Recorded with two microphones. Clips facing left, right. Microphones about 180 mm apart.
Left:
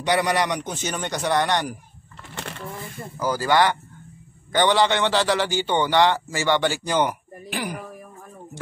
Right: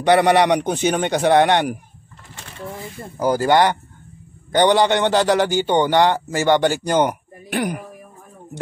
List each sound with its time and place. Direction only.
0.0 s speech: 60° right (ahead or behind)
3.3 s a man's voice: 55° right (ahead or behind)